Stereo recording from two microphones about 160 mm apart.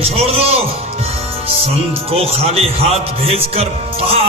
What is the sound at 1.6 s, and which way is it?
Speech, 40° right (ahead or behind).